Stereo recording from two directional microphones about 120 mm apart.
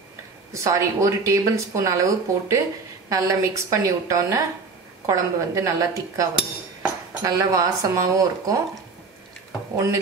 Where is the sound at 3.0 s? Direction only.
30° right (ahead or behind).